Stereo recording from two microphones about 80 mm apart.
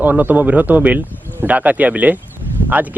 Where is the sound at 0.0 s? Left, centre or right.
Right.